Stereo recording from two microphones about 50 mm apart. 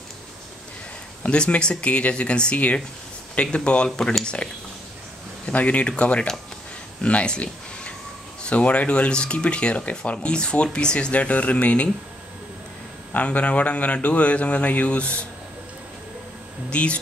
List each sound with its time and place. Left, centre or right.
1.2 s speech: left
5.5 s speech: left
13.1 s speech: left
16.7 s speech: left